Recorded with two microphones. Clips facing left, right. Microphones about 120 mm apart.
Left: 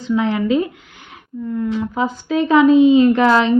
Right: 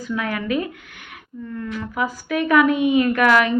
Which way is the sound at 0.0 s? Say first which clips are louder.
Left 7 dB; 25° left (ahead or behind).